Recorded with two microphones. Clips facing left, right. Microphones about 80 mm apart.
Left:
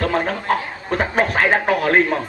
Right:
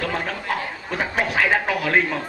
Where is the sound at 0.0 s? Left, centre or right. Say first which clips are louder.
Left 6 dB; left.